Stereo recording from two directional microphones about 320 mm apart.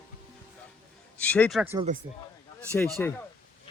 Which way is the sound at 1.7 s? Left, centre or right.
Right.